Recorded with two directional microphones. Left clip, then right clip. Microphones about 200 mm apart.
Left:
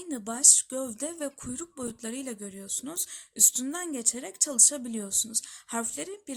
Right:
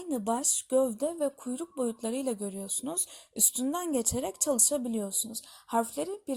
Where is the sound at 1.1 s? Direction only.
25° left (ahead or behind).